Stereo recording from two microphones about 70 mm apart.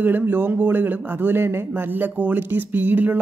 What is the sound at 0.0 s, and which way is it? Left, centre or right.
A woman's voice, right.